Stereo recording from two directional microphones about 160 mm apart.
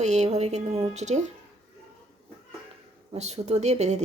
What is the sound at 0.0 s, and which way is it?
Speech, 45° right (ahead or behind).